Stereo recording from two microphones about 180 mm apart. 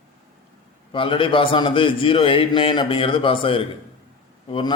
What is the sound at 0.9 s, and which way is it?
A man's voice, 30° left (ahead or behind).